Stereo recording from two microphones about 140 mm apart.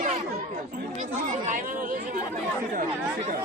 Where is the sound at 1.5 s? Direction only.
75° right (ahead or behind).